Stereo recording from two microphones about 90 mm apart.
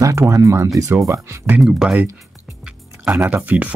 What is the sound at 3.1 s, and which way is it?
Speech, 20° right (ahead or behind).